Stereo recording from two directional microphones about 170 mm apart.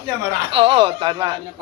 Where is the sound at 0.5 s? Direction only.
30° right (ahead or behind).